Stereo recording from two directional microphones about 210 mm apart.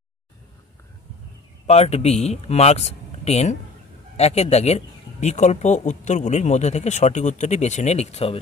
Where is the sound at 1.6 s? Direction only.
30° left (ahead or behind).